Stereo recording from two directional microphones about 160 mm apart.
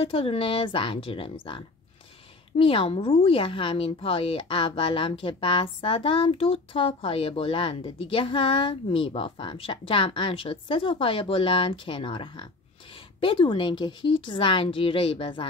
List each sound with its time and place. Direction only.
0.0 s a woman's voice: 35° left (ahead or behind)